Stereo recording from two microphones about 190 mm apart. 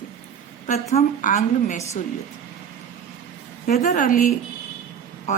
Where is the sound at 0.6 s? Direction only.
35° left (ahead or behind).